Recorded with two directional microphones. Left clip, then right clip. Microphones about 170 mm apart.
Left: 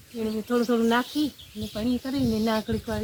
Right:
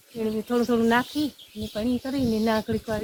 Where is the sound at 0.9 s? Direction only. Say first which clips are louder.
Right 1 dB; 5° right (ahead or behind).